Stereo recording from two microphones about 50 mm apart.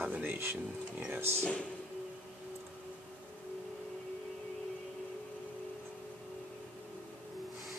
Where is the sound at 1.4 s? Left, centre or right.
Left.